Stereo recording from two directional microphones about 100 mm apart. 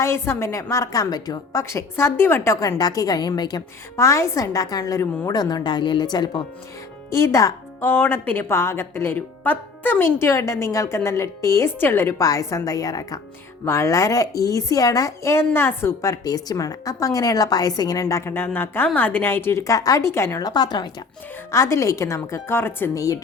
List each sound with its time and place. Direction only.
0.0 s a woman's voice: 25° left (ahead or behind)
1.7 s a woman's voice: 25° left (ahead or behind); by 3.6 s 45° left (ahead or behind)
3.9 s a woman's voice: 30° left (ahead or behind); by 6.4 s 45° left (ahead or behind)
7.1 s a woman's voice: 30° left (ahead or behind)
18.0 s a woman's voice: 25° left (ahead or behind)
19.6 s a woman's voice: 35° left (ahead or behind)
20.4 s speech: 45° left (ahead or behind)
21.5 s a woman's voice: 30° left (ahead or behind)